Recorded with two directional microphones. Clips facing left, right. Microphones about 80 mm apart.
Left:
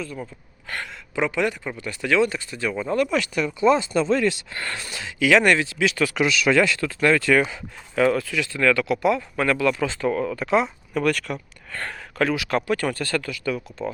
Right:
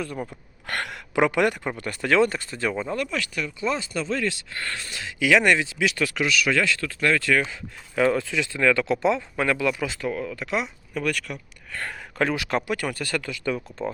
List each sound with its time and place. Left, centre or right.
0.3 s speech: right
3.1 s speech: left; by 5.1 s centre
5.2 s speech: centre
6.1 s speech: left; by 7.6 s centre
8.1 s speech: right; by 11.3 s centre
11.8 s speech: centre
12.7 s speech: centre
13.3 s speech: right